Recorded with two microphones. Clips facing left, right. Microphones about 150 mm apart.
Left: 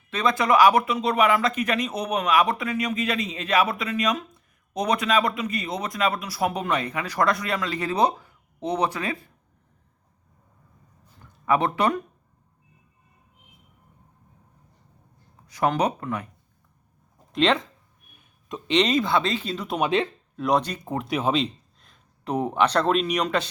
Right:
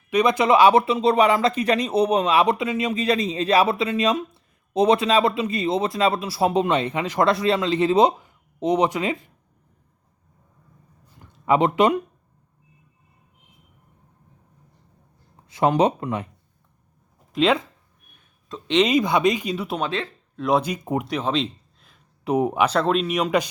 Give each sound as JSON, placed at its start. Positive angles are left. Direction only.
{"t": 0.1, "sound": "speech", "side_deg": -20}
{"t": 11.4, "sound": "speech", "side_deg": -20}
{"t": 15.4, "sound": "speech", "side_deg": -25}
{"t": 17.3, "sound": "speech", "side_deg": -5}
{"t": 18.7, "sound": "speech", "side_deg": -5}
{"t": 18.9, "sound": "speech", "side_deg": -15}
{"t": 19.8, "sound": "speech", "side_deg": 15}
{"t": 20.3, "sound": "speech", "side_deg": 0}
{"t": 21.1, "sound": "speech", "side_deg": 5}